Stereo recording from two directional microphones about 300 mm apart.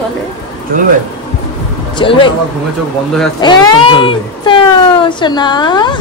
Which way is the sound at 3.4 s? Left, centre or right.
Centre.